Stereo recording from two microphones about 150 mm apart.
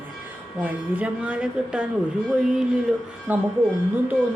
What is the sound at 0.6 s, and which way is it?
A woman's voice, 10° right (ahead or behind).